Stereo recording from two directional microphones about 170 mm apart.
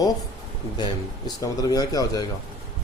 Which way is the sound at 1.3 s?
20° left (ahead or behind).